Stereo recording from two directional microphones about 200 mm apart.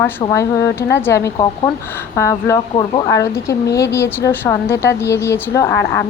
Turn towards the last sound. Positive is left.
turn(degrees=10)  # may be behind; listen again after turning